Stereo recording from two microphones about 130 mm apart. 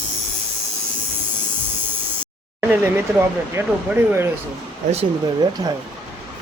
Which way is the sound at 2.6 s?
10° right (ahead or behind).